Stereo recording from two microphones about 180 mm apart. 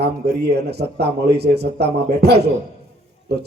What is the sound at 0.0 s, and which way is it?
A man's voice, 65° right (ahead or behind).